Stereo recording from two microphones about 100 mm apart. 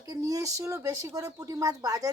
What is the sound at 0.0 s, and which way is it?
Speech, 35° right (ahead or behind).